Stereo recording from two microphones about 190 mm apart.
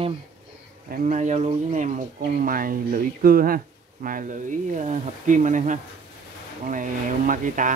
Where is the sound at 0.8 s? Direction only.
45° right (ahead or behind).